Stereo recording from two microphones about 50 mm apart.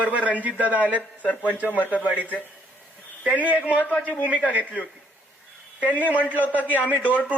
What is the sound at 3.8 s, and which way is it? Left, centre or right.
Speech, left.